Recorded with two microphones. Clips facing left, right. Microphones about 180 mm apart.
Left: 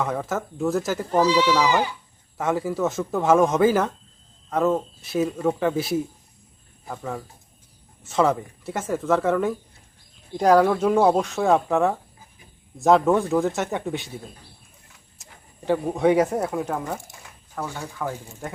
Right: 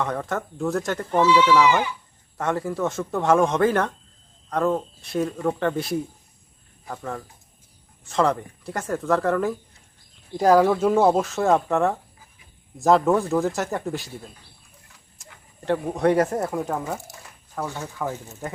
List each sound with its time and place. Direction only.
0.0 s speech: 5° left (ahead or behind)
1.1 s speech: 40° left (ahead or behind)
2.4 s speech: centre (ahead or behind)